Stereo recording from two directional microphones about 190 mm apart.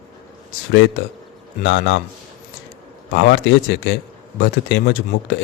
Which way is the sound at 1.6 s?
70° left (ahead or behind).